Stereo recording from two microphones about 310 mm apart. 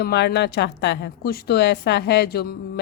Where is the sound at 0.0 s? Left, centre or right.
Left.